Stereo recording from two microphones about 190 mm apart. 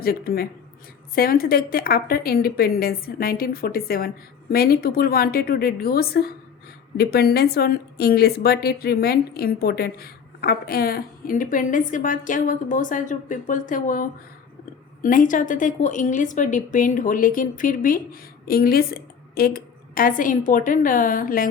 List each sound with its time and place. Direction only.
0.0 s a woman's voice: 50° left (ahead or behind)